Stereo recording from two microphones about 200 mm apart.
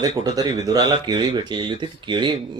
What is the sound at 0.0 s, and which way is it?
Speech, 20° right (ahead or behind).